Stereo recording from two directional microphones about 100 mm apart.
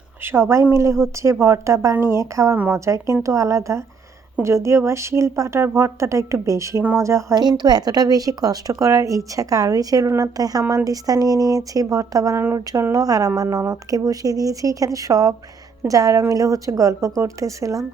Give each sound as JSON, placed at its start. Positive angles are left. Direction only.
{"t": 0.2, "sound": "a woman's voice", "side_deg": -25}
{"t": 7.3, "sound": "a woman's voice", "side_deg": -45}